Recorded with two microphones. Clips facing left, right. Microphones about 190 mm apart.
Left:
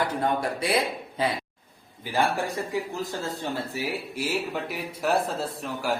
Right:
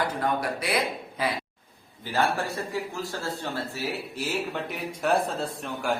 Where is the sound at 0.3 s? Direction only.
25° left (ahead or behind).